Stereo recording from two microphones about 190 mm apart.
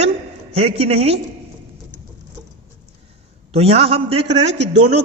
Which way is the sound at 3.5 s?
30° right (ahead or behind).